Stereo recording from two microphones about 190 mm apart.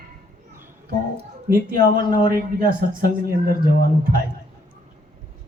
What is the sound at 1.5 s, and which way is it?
Speech, 50° right (ahead or behind).